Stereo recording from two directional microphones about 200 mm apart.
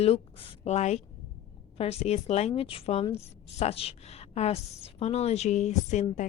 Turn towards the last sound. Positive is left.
turn(degrees=35)  # may be behind; listen again after turning